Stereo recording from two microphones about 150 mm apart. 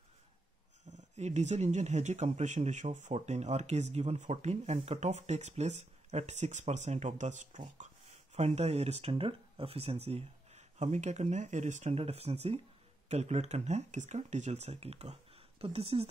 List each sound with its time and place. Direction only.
0.8 s speech: 50° right (ahead or behind)